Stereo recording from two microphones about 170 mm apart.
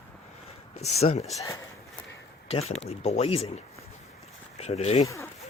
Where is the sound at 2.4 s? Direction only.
35° left (ahead or behind).